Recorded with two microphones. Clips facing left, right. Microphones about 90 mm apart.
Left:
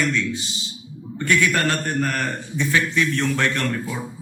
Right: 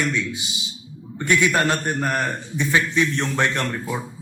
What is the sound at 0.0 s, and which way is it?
A man's voice, 15° right (ahead or behind).